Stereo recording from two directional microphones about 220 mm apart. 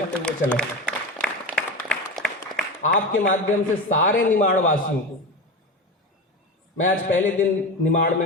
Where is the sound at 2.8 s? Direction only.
35° left (ahead or behind).